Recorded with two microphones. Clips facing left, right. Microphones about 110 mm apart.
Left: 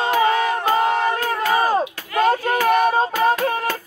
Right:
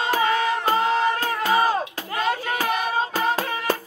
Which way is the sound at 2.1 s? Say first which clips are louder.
Left 7 dB; 45° left (ahead or behind).